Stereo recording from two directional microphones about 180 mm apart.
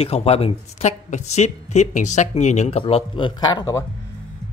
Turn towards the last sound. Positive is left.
turn(degrees=20)  # may be behind; listen again after turning